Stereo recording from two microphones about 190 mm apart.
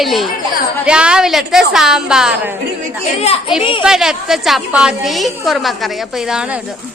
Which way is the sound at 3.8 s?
5° right (ahead or behind).